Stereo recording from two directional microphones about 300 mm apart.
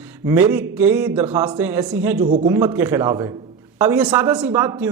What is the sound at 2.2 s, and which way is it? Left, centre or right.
Speech, right.